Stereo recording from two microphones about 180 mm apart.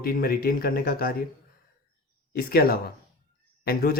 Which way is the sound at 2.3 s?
55° left (ahead or behind).